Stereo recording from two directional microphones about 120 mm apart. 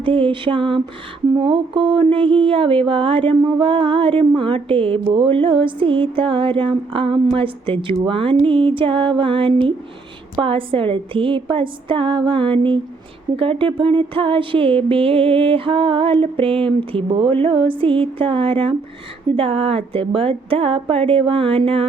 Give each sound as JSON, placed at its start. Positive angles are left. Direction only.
{"t": 0.0, "sound": "speech", "side_deg": -45}